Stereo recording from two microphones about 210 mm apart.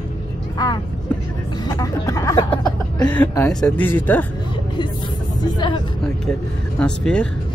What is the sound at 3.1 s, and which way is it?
Speech, 10° left (ahead or behind).